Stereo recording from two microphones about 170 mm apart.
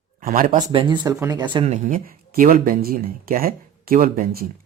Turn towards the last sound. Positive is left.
turn(degrees=-60)  # may be behind; listen again after turning